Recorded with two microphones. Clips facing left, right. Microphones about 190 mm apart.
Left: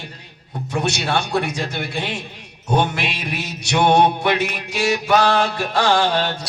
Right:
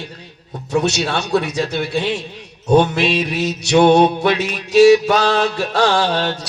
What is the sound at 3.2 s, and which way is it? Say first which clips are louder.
A man's voice: right 8 dB; 60° left (ahead or behind).